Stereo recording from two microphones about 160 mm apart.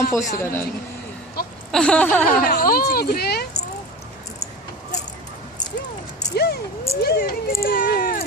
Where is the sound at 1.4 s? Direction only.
70° left (ahead or behind).